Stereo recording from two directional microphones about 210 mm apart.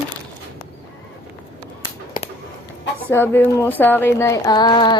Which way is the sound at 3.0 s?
10° left (ahead or behind).